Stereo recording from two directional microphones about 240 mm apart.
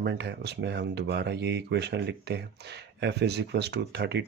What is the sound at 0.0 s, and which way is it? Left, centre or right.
Speech, right.